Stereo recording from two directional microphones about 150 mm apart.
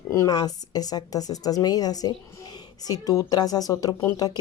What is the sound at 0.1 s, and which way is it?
Speech, 25° left (ahead or behind).